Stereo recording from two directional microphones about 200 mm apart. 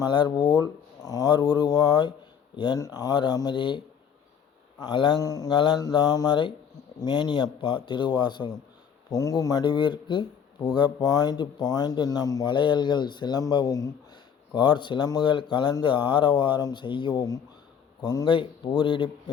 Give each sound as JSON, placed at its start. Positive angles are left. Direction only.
{"t": 0.0, "sound": "speech", "side_deg": 20}